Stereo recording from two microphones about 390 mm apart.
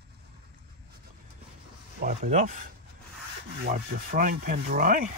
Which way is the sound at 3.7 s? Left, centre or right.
Right.